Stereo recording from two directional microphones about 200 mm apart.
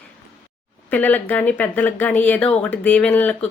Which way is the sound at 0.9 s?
10° left (ahead or behind).